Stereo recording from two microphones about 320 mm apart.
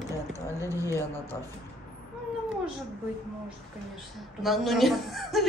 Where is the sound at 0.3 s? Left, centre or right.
Centre.